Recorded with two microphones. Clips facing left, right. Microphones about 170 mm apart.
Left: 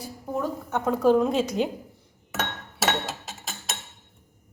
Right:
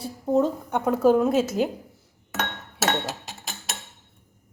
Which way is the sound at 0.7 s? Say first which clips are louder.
Left 1 dB; 10° right (ahead or behind).